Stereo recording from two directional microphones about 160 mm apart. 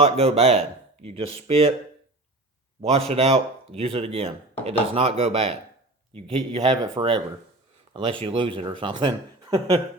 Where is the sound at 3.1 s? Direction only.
40° right (ahead or behind).